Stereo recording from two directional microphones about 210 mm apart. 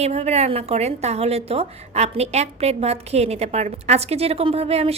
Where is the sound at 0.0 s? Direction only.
30° right (ahead or behind).